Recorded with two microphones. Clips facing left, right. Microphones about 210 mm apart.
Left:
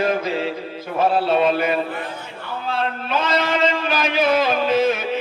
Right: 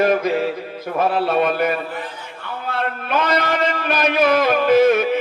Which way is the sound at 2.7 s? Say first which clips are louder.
Right 1 dB; 55° right (ahead or behind).